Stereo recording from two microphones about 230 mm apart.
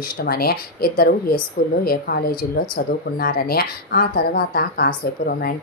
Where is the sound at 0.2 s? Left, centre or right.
Left.